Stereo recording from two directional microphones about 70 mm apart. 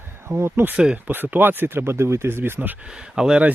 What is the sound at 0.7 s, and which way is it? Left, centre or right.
Speech, centre.